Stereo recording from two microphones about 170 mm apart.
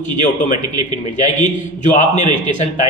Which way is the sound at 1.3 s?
50° left (ahead or behind).